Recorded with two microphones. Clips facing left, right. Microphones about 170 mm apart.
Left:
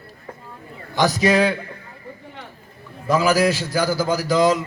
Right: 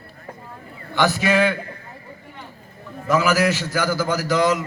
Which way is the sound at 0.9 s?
40° left (ahead or behind).